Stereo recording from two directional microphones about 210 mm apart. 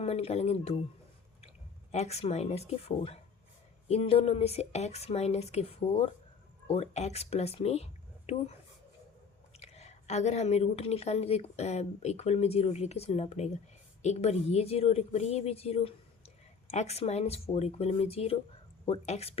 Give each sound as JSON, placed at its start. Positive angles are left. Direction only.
{"t": 0.0, "sound": "speech", "side_deg": 30}
{"t": 1.9, "sound": "a woman's voice", "side_deg": 30}
{"t": 9.6, "sound": "a woman's voice", "side_deg": 30}